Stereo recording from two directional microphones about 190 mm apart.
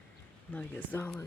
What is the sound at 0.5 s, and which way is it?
Speech, 10° left (ahead or behind).